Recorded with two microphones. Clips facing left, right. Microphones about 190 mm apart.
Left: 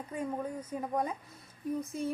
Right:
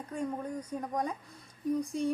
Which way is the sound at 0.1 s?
5° left (ahead or behind).